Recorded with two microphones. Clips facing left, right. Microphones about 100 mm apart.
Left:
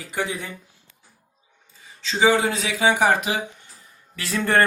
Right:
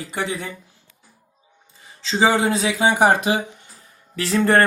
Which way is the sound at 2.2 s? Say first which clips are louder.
Right 1 dB; 35° right (ahead or behind).